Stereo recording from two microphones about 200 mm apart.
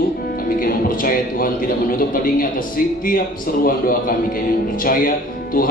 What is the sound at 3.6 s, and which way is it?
Speech, 45° left (ahead or behind).